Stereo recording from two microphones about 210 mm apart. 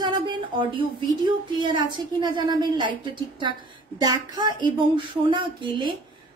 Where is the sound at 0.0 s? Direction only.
20° right (ahead or behind).